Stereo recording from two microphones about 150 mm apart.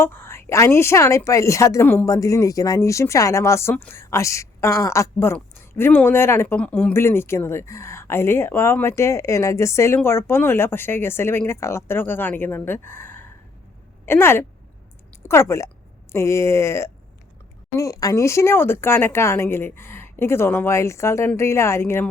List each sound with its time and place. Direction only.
0.0 s a woman's voice: 15° left (ahead or behind)